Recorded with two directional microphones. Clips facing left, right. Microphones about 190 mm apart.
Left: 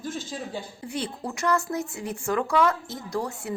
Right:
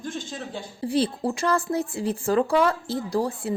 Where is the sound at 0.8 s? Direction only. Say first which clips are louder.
Right 10 dB; 30° right (ahead or behind).